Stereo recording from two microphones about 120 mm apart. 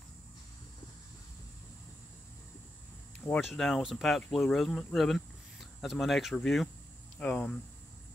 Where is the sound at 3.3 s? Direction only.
Centre (ahead or behind).